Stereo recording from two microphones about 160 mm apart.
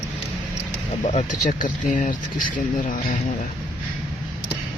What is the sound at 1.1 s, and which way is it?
Speech, 50° left (ahead or behind).